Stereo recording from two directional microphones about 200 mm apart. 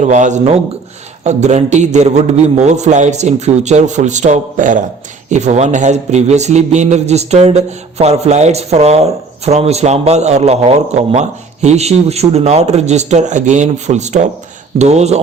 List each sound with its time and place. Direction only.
0.0 s a man's voice: 35° right (ahead or behind)